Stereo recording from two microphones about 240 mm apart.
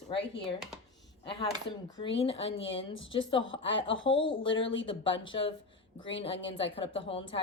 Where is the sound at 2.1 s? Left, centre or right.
Left.